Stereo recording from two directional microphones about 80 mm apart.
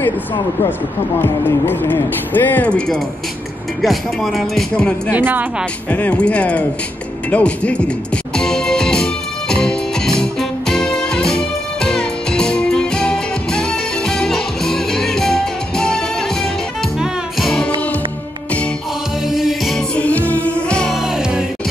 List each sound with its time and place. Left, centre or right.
1.2 s speech: left
3.8 s speech: centre
4.7 s speech: centre
5.1 s speech: right
5.9 s speech: centre
8.4 s music: centre
19.2 s music: centre
20.0 s music: centre
20.9 s music: centre